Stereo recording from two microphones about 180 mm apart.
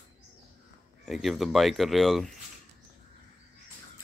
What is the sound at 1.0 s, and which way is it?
Speech, centre (ahead or behind).